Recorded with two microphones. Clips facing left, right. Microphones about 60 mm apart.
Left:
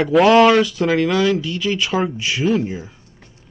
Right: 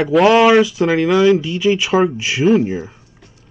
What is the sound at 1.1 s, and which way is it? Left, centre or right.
Speech, centre.